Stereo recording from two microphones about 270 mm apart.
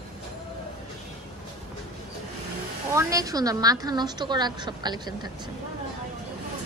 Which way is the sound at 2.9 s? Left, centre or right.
Centre.